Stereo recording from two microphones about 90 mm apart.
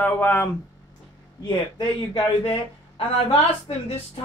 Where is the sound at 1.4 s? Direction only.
50° left (ahead or behind).